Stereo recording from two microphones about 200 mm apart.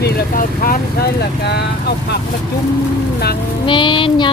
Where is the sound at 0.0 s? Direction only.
45° left (ahead or behind).